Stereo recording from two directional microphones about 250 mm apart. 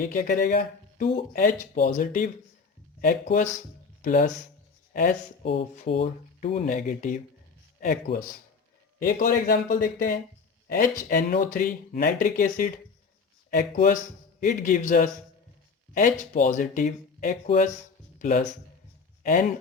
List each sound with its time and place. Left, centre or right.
0.0 s speech: left
5.5 s speech: left